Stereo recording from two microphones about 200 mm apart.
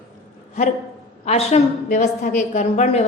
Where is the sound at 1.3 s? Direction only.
35° left (ahead or behind).